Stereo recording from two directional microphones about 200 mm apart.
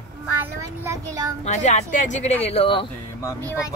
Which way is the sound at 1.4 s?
35° left (ahead or behind).